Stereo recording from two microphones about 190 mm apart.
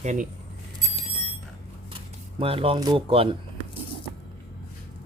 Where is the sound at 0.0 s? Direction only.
40° right (ahead or behind).